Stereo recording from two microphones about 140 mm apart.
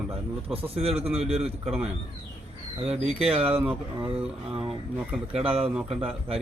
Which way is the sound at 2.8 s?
45° right (ahead or behind).